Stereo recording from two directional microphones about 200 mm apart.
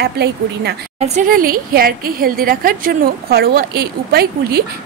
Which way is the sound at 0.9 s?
35° right (ahead or behind).